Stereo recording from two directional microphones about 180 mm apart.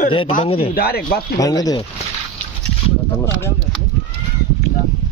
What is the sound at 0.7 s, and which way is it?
Speech, 60° left (ahead or behind).